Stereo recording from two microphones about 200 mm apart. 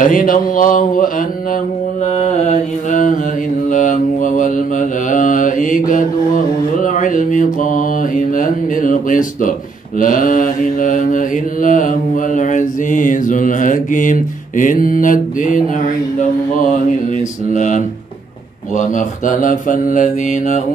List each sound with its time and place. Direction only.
0.0 s speech: 45° left (ahead or behind)
2.2 s mantra: 35° left (ahead or behind)
17.5 s mantra: 40° left (ahead or behind)